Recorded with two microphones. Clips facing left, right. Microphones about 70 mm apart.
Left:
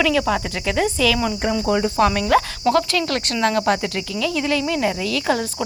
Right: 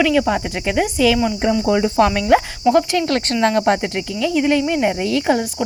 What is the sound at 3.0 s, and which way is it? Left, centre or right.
Speech, right.